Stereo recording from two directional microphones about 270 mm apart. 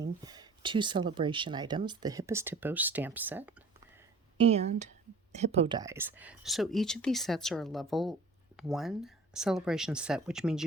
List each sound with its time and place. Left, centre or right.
0.0 s speech: centre
4.4 s speech: right; by 10.6 s centre